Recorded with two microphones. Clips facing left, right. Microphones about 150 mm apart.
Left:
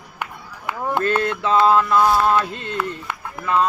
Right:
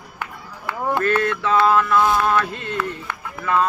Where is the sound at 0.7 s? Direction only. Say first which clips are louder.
Even; 25° left (ahead or behind).